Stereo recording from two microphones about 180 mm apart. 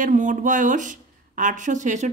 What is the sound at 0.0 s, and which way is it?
Speech, 45° right (ahead or behind).